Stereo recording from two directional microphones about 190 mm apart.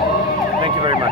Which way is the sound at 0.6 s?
25° right (ahead or behind).